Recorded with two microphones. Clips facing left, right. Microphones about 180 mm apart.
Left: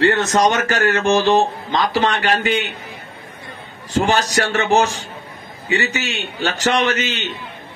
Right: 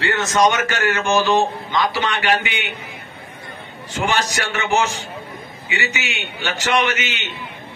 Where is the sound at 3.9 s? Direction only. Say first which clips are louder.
Left 4 dB; 35° left (ahead or behind).